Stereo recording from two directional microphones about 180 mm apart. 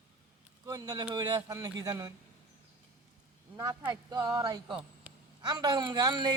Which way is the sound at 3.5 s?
25° right (ahead or behind).